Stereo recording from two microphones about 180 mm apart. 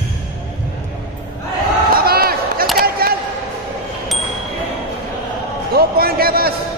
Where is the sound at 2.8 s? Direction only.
55° right (ahead or behind).